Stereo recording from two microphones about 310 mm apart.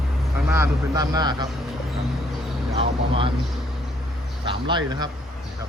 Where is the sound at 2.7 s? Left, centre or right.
Centre.